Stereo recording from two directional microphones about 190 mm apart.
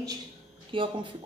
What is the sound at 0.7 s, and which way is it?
Speech, 25° right (ahead or behind).